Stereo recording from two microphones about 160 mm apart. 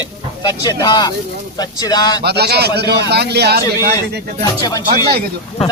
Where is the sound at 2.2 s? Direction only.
90° right.